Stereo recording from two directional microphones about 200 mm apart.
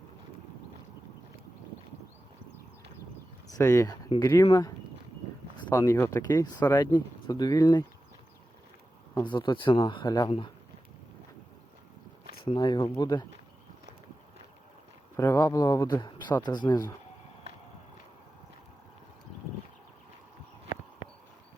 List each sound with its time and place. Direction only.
3.4 s speech: 15° left (ahead or behind)
9.1 s speech: 25° left (ahead or behind)
12.5 s speech: 20° left (ahead or behind)
15.1 s speech: 15° left (ahead or behind)